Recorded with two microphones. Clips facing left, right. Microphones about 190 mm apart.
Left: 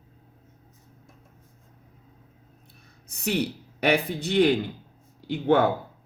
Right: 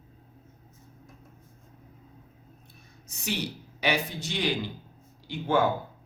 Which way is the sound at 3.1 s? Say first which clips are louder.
Left 6 dB; 60° left (ahead or behind).